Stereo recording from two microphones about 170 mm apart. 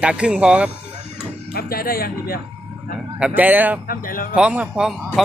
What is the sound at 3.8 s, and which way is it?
Speech, 55° left (ahead or behind).